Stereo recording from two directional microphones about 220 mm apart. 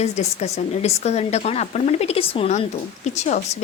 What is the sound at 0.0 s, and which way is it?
A woman's voice, 30° left (ahead or behind).